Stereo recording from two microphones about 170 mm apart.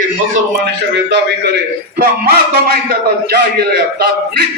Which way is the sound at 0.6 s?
75° right (ahead or behind).